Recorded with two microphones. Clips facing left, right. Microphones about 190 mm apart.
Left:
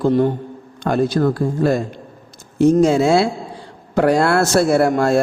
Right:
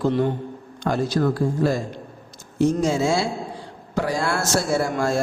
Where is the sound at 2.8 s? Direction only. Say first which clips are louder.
Left 7 dB; 65° left (ahead or behind).